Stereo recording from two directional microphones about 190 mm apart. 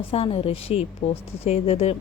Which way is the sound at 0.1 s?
30° left (ahead or behind).